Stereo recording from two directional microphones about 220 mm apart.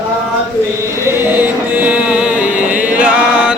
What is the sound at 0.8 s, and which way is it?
Music, 10° right (ahead or behind).